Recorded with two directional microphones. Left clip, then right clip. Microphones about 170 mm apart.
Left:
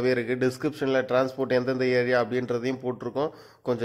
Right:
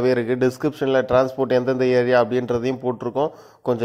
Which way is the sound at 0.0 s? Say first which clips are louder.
Right 6 dB; 15° right (ahead or behind).